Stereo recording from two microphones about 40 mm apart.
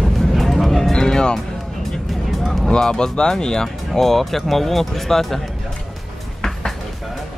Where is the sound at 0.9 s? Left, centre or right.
Centre.